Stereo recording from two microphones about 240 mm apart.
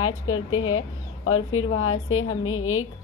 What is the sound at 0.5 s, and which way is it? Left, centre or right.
A woman's voice, left.